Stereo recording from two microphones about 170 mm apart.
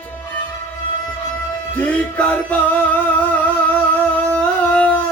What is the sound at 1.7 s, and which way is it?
Music, 10° left (ahead or behind).